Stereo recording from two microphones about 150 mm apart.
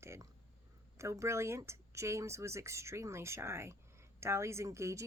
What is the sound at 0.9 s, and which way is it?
Speech, 20° right (ahead or behind).